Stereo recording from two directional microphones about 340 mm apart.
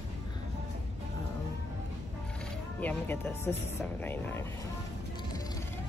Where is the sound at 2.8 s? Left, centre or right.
Centre.